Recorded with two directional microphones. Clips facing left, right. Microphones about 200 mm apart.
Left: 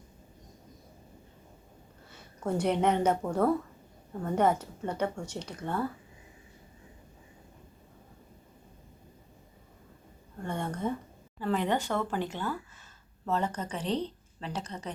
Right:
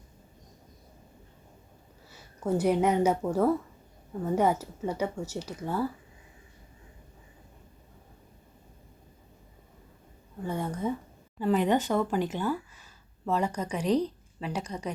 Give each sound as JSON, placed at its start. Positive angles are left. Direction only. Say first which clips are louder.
{"t": 2.0, "sound": "speech", "louder": "right 3 dB", "side_deg": -5}
{"t": 10.4, "sound": "speech", "louder": "right 2 dB", "side_deg": -5}